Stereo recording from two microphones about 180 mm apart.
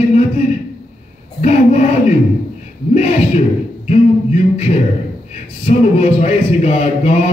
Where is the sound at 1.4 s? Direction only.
40° left (ahead or behind).